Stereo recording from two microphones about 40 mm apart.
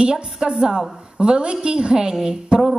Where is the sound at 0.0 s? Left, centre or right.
Centre.